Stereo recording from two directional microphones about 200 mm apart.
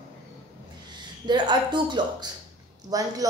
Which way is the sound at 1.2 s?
20° right (ahead or behind).